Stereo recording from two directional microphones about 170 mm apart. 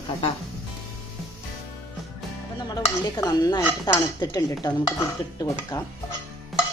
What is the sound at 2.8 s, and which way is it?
Stir, 20° left (ahead or behind).